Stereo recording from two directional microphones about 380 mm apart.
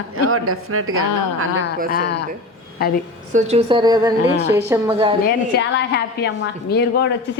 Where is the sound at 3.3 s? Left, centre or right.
Centre.